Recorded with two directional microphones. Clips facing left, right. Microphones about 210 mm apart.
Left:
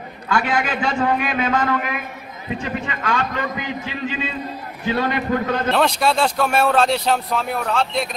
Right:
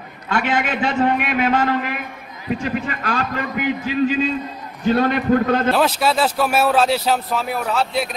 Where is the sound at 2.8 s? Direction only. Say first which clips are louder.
Even; 35° right (ahead or behind).